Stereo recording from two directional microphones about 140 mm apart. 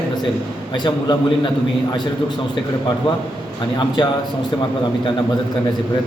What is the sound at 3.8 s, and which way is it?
Speech, 30° left (ahead or behind).